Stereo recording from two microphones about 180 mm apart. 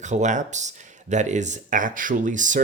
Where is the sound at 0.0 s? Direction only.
40° right (ahead or behind).